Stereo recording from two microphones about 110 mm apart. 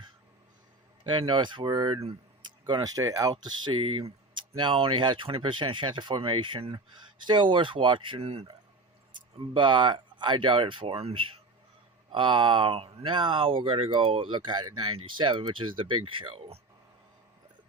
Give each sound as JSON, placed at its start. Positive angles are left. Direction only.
{"t": 1.0, "sound": "speech", "side_deg": -45}
{"t": 3.3, "sound": "speech", "side_deg": -45}
{"t": 9.4, "sound": "speech", "side_deg": -45}